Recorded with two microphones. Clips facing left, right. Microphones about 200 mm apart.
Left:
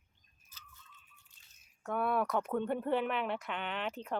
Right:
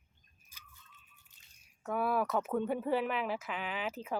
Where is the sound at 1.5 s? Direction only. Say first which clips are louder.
Right 1 dB; 5° right (ahead or behind).